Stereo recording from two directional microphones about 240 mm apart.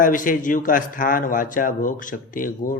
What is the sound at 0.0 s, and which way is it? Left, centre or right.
A man's voice, left.